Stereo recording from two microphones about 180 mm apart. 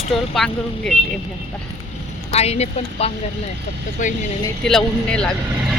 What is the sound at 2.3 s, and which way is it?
A woman's voice, 35° left (ahead or behind).